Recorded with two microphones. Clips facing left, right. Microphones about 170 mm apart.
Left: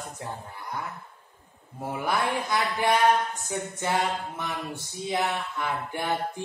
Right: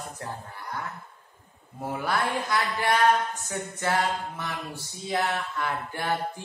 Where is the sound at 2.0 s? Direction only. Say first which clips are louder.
Left 1 dB; 15° left (ahead or behind).